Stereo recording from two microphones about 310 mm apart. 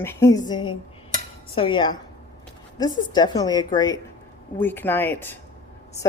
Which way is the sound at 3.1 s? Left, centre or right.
Centre.